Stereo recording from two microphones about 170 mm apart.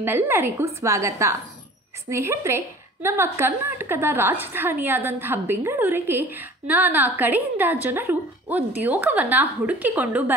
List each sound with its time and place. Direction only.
0.0 s a woman's voice: 10° right (ahead or behind)